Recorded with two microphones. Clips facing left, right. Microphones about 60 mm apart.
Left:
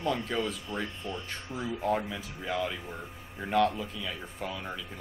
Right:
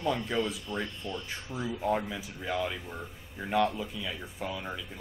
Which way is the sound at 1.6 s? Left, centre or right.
Centre.